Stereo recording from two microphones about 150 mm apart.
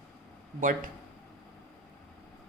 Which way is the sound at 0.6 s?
65° right (ahead or behind).